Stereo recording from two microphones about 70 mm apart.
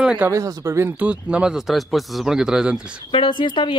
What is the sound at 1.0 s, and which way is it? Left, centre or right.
Speech, centre.